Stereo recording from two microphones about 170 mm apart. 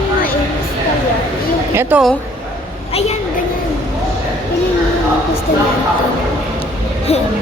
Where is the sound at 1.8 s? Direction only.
10° right (ahead or behind).